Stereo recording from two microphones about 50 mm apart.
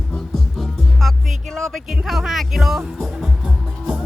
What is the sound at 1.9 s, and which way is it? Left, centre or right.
Music, centre.